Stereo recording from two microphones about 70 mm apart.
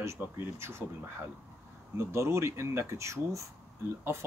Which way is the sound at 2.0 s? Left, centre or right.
Right.